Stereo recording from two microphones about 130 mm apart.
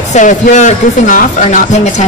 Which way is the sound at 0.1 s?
70° left (ahead or behind).